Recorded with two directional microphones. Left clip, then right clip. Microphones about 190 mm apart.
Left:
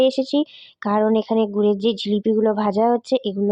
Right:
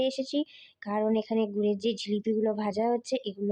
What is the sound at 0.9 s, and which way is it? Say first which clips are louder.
Speech: left 9 dB; 25° left (ahead or behind).